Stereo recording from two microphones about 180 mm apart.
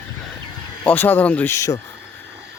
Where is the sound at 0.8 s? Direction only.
10° left (ahead or behind).